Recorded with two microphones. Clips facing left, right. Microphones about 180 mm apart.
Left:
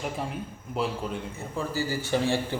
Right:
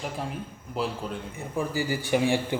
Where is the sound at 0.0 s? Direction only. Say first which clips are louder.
Left 1 dB; centre (ahead or behind).